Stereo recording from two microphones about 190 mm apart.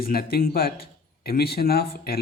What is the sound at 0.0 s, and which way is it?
Speech, 50° left (ahead or behind).